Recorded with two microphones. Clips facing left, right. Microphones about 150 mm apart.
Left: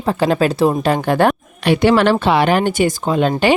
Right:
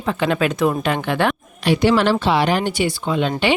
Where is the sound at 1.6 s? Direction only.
60° left (ahead or behind); by 3.3 s 45° left (ahead or behind).